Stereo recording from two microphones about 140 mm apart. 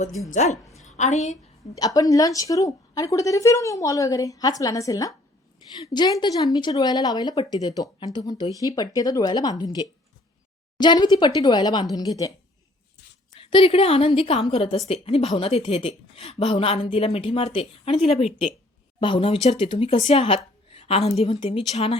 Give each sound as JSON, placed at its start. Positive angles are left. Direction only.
{"t": 0.3, "sound": "a woman's voice", "side_deg": 55}
{"t": 1.7, "sound": "a woman's voice", "side_deg": 25}
{"t": 13.4, "sound": "a woman's voice", "side_deg": 40}